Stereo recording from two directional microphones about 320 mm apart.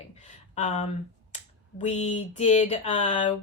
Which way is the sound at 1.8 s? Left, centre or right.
Centre.